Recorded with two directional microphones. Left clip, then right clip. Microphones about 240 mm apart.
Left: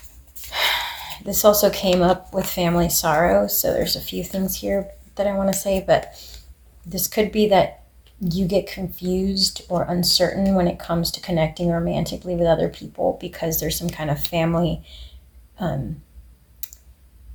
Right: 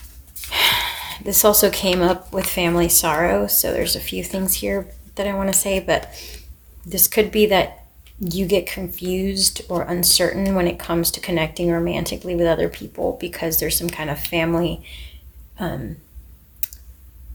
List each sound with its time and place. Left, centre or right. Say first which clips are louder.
0.5 s speech: right 4 dB; right